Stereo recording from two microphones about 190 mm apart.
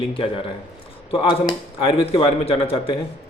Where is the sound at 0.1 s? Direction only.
25° left (ahead or behind).